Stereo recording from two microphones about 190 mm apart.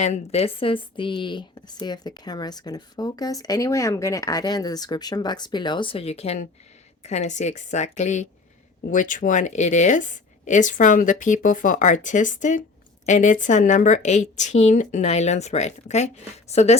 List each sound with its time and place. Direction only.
0.0 s a woman's voice: 35° left (ahead or behind)